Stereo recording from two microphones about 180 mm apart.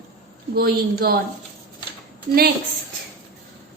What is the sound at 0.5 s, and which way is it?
Speech, 55° right (ahead or behind).